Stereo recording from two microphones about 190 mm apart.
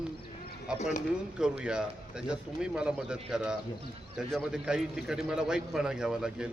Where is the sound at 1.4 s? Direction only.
5° right (ahead or behind).